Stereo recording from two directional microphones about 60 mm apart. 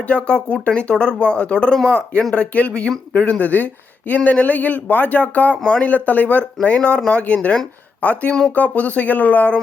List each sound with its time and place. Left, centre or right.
0.1 s speech: centre
3.4 s speech: left
5.6 s speech: centre
5.9 s speech: left
6.6 s speech: centre